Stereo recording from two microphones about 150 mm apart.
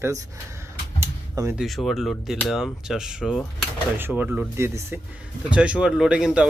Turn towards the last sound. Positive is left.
turn(degrees=-5)  # may be behind; listen again after turning